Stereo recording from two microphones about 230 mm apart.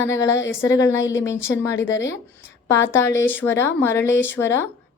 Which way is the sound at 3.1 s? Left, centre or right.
Centre.